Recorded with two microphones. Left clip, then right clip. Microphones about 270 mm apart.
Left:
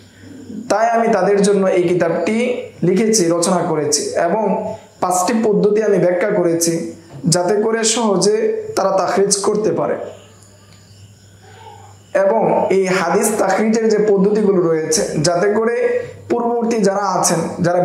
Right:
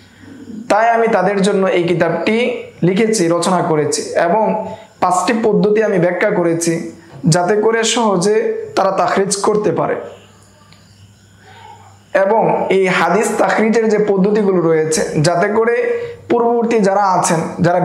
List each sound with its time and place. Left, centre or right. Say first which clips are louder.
0.7 s a man's voice: right 2 dB; right
12.1 s a man's voice: right 2 dB; right